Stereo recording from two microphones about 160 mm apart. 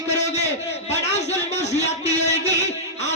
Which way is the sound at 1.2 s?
45° left (ahead or behind).